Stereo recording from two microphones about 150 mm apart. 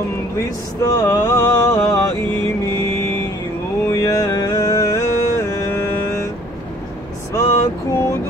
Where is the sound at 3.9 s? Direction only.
20° left (ahead or behind).